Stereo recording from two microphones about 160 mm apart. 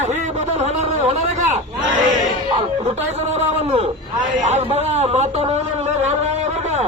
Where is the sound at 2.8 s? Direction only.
45° right (ahead or behind).